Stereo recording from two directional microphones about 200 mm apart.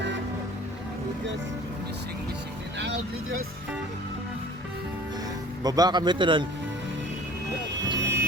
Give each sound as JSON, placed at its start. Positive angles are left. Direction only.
{"t": 2.7, "sound": "vehicle", "side_deg": -60}
{"t": 5.6, "sound": "speech", "side_deg": -20}
{"t": 7.9, "sound": "vehicle", "side_deg": -60}